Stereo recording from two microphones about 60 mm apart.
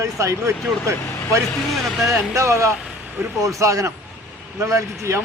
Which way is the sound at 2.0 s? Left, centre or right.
Right.